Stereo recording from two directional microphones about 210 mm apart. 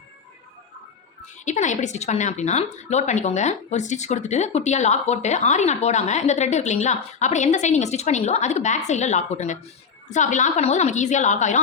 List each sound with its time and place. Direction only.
1.5 s a woman's voice: 35° left (ahead or behind)